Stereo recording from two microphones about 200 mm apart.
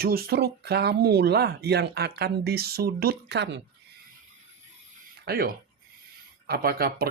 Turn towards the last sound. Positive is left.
turn(degrees=-50)  # may be behind; listen again after turning